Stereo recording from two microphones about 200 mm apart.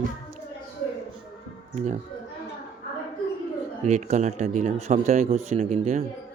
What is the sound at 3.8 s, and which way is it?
Speech, 35° right (ahead or behind).